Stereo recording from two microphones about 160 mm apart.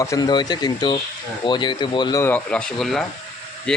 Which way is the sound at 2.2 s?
10° left (ahead or behind).